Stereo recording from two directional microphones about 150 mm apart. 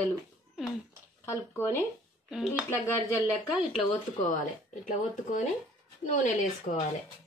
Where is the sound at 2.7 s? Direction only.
15° left (ahead or behind).